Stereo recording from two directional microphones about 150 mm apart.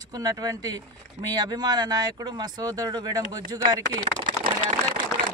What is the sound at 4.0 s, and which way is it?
Speech, 60° right (ahead or behind).